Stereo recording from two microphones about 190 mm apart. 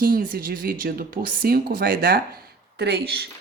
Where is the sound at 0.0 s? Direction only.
50° right (ahead or behind).